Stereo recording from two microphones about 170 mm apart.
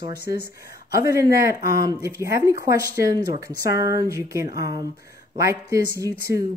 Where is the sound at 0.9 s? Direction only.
20° right (ahead or behind).